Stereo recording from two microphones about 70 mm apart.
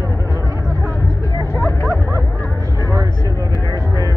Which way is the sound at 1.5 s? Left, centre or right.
Left.